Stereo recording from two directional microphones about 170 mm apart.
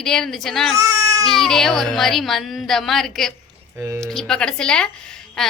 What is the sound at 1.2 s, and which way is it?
A woman's voice, centre (ahead or behind).